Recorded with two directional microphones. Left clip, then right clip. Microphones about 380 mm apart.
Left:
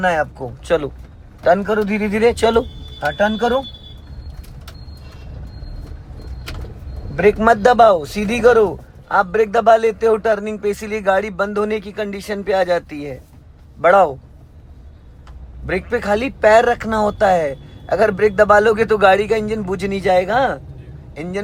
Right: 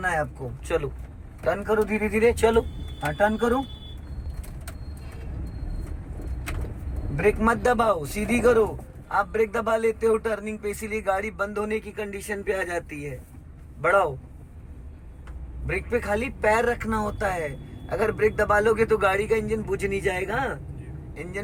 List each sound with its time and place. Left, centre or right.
0.0 s a man's voice: centre
7.2 s a man's voice: centre
15.6 s a man's voice: centre